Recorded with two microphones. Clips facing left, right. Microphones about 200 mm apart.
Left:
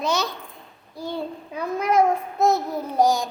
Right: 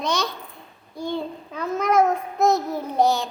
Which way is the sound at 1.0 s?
5° left (ahead or behind).